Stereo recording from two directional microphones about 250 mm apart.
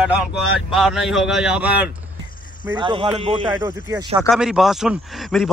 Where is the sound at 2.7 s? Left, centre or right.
Centre.